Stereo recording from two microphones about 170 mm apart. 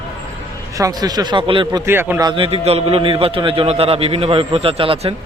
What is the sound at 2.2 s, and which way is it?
A man's voice, 30° right (ahead or behind).